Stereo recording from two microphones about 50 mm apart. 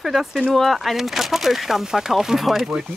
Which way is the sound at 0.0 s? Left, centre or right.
Centre.